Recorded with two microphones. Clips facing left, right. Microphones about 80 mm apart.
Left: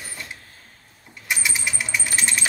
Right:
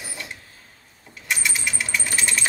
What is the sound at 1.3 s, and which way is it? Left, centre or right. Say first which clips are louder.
Typewriter: even; centre.